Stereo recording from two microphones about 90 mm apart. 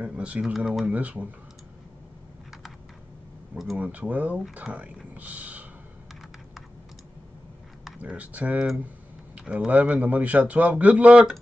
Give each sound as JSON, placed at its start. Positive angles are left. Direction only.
{"t": 0.0, "sound": "a man's voice", "side_deg": -10}
{"t": 3.7, "sound": "a man's voice", "side_deg": -15}
{"t": 5.1, "sound": "a sound", "side_deg": -15}
{"t": 8.0, "sound": "a man's voice", "side_deg": -15}